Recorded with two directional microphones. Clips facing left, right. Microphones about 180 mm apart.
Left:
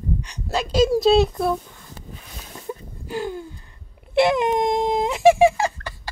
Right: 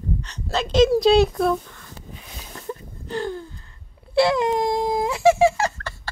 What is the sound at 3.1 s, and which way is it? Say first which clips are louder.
Gasp: even; 10° left (ahead or behind).